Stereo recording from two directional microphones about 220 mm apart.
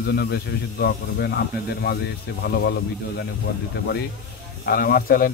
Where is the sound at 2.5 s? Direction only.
50° left (ahead or behind).